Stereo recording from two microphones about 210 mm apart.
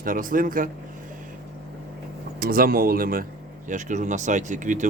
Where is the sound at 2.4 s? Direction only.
45° right (ahead or behind).